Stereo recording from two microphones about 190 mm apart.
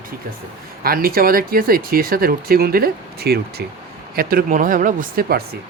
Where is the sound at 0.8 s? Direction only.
50° right (ahead or behind).